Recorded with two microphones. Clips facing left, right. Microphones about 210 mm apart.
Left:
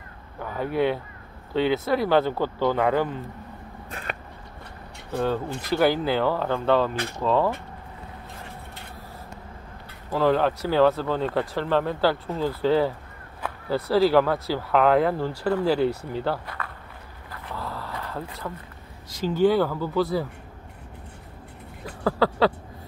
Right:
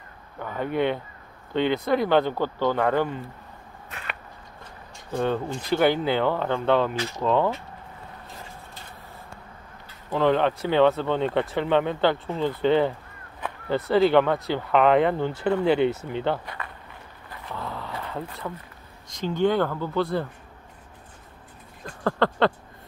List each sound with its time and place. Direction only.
0.4 s speech: 5° left (ahead or behind)
3.9 s a sound: 40° left (ahead or behind)
5.1 s speech: 5° left (ahead or behind)
10.1 s speech: 5° left (ahead or behind)
17.5 s vehicle: centre (ahead or behind)
19.0 s speech: 5° left (ahead or behind)
21.8 s a sound: 5° left (ahead or behind)